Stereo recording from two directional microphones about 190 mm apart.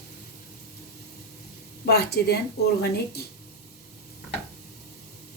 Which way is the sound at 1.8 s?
60° left (ahead or behind).